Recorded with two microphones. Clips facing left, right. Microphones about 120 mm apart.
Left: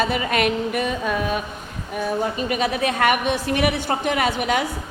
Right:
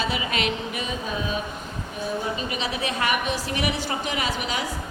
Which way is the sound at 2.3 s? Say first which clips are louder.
Left 6 dB; 50° left (ahead or behind).